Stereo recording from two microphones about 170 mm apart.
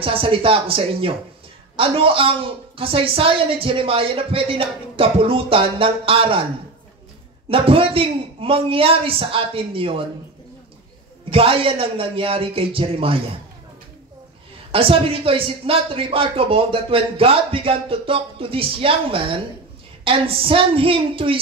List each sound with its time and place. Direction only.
0.0 s speech: 30° right (ahead or behind)
7.4 s speech: 35° right (ahead or behind)
11.2 s speech: 30° right (ahead or behind)
14.7 s speech: 35° right (ahead or behind)